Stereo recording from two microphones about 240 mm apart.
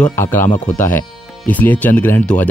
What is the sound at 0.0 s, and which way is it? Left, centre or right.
Speech, centre.